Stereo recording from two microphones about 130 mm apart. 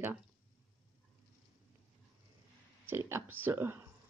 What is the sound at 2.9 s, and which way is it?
Speech, 20° right (ahead or behind).